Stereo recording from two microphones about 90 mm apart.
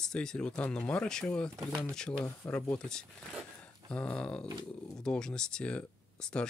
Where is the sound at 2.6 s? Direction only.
5° left (ahead or behind).